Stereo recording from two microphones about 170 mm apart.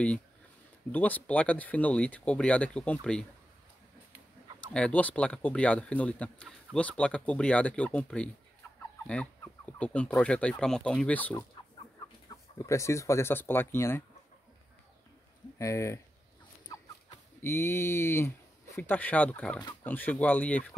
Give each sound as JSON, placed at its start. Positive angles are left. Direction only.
{"t": 0.9, "sound": "speech", "side_deg": 10}
{"t": 4.7, "sound": "speech", "side_deg": 5}
{"t": 12.5, "sound": "speech", "side_deg": 15}
{"t": 15.6, "sound": "speech", "side_deg": 15}
{"t": 17.4, "sound": "speech", "side_deg": 15}